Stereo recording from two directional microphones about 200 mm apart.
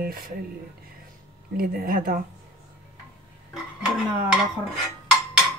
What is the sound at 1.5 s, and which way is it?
Speech, 45° right (ahead or behind).